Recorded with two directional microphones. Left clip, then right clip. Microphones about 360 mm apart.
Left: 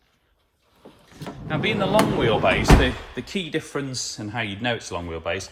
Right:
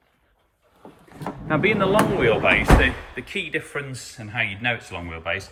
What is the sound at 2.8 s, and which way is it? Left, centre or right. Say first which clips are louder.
Speech: right 2 dB; left.